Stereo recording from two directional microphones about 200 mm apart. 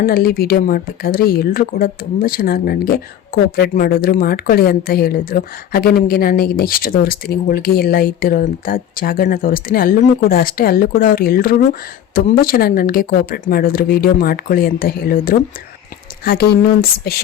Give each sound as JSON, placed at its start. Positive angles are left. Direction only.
{"t": 0.0, "sound": "speech", "side_deg": 45}